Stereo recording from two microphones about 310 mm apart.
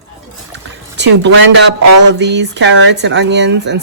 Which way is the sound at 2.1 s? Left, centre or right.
Right.